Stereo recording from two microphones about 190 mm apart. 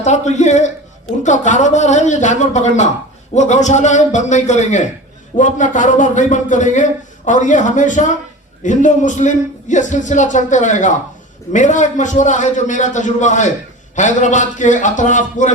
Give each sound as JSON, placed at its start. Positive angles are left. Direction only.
{"t": 0.0, "sound": "speech", "side_deg": 40}